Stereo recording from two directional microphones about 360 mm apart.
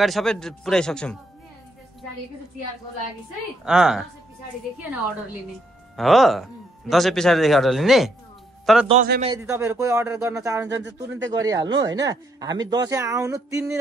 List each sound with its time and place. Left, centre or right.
0.0 s speech: centre
3.6 s speech: centre
5.9 s speech: centre
8.8 s speech: right
9.3 s speech: centre